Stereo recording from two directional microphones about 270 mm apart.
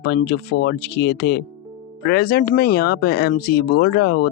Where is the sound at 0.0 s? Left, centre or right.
Left.